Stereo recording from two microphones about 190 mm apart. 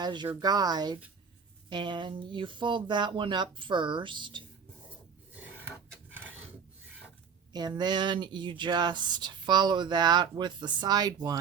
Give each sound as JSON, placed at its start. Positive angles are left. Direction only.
{"t": 0.0, "sound": "speech", "side_deg": -25}
{"t": 7.5, "sound": "speech", "side_deg": -20}